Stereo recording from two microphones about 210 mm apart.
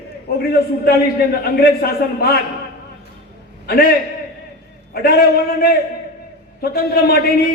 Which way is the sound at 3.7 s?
45° left (ahead or behind).